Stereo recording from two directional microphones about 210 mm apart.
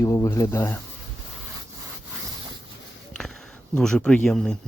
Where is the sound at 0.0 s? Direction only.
15° left (ahead or behind).